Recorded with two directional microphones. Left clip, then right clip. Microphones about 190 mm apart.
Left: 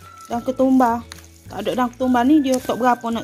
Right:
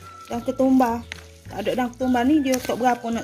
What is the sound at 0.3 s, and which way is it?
Speech, 35° left (ahead or behind).